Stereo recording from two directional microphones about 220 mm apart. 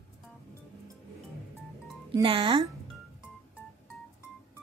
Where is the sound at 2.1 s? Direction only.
20° right (ahead or behind).